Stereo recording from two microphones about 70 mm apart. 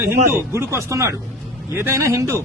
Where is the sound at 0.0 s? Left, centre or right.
Right.